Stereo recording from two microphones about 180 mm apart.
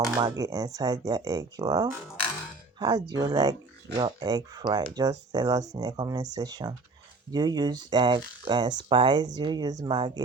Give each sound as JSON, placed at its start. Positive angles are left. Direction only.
{"t": 0.2, "sound": "speech", "side_deg": -20}